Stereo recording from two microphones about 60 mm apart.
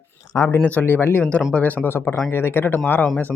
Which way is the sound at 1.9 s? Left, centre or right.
Left.